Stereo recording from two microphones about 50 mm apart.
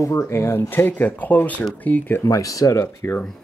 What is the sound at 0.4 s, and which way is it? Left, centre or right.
Speech, left.